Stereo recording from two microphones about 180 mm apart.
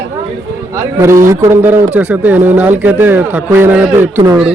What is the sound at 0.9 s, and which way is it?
Speech, 15° right (ahead or behind).